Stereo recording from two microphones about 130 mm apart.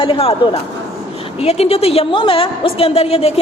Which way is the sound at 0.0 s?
45° left (ahead or behind).